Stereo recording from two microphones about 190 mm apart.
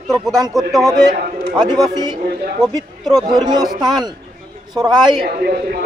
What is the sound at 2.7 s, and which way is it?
A man's voice, 20° right (ahead or behind).